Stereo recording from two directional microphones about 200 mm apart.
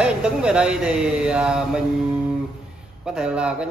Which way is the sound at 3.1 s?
5° right (ahead or behind).